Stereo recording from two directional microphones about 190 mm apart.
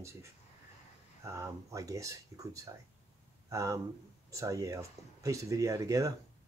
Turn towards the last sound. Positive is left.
turn(degrees=-15)  # may be behind; listen again after turning